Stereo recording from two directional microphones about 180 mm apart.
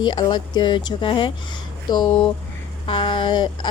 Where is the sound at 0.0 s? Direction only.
25° left (ahead or behind).